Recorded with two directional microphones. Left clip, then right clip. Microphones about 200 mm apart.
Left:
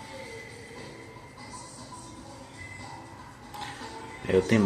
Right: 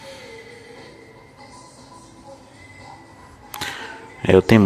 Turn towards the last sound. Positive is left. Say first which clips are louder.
# right 10 dB
turn(degrees=-60)  # may be behind; listen again after turning